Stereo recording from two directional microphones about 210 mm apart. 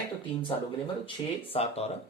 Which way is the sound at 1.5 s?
30° left (ahead or behind).